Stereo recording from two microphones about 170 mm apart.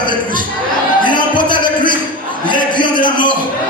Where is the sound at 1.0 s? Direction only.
25° left (ahead or behind).